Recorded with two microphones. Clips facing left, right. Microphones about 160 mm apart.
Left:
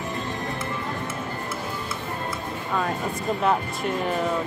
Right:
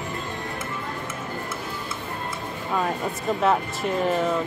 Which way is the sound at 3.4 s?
Centre (ahead or behind).